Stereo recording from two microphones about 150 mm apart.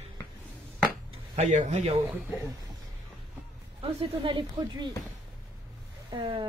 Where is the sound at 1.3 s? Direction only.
50° right (ahead or behind).